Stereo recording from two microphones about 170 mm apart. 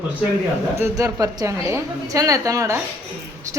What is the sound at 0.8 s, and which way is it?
A woman's voice, 20° right (ahead or behind).